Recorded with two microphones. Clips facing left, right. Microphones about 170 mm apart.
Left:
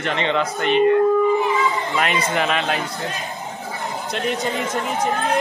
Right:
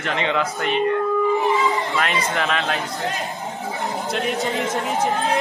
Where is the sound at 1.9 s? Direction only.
5° left (ahead or behind).